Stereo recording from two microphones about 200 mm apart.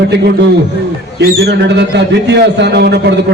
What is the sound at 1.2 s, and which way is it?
A man's voice, 55° right (ahead or behind).